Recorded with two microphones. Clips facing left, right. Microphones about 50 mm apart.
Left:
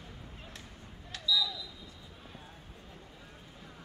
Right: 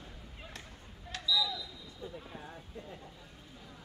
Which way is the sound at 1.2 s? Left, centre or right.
Centre.